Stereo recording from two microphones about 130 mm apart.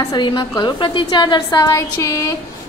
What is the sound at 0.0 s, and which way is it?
A woman's voice, 30° left (ahead or behind).